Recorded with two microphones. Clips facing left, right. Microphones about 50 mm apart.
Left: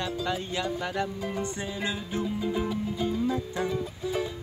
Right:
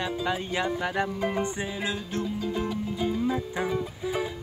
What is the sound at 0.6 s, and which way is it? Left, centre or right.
Music, right.